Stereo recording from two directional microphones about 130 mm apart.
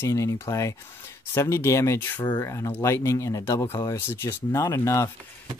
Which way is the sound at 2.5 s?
20° left (ahead or behind).